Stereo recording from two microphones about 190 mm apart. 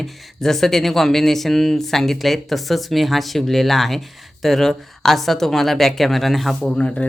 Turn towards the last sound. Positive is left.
turn(degrees=5)  # may be behind; listen again after turning